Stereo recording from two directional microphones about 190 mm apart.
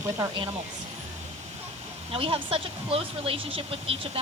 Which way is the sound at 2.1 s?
30° right (ahead or behind).